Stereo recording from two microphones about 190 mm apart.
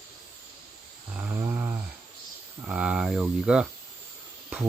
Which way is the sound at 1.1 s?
10° right (ahead or behind).